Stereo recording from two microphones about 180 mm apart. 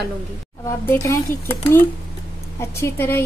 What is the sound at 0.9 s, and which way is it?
A woman's voice, 15° left (ahead or behind).